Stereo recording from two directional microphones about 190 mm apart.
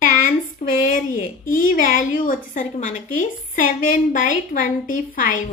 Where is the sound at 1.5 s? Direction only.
45° left (ahead or behind).